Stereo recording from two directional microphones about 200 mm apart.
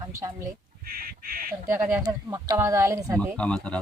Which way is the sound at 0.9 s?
45° right (ahead or behind).